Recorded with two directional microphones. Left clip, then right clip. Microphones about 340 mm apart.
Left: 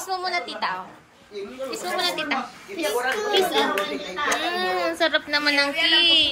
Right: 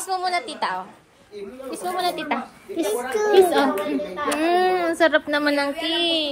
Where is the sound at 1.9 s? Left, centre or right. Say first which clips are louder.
Even; centre.